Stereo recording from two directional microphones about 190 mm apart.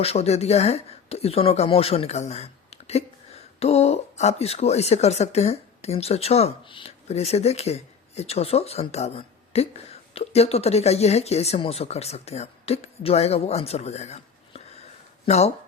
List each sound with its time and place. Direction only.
0.0 s speech: 35° left (ahead or behind)